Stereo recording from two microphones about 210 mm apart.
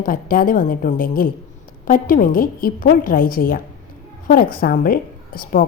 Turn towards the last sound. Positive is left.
turn(degrees=40)  # may be behind; listen again after turning